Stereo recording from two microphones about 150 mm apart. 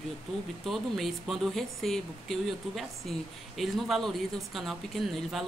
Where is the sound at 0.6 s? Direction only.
Centre (ahead or behind).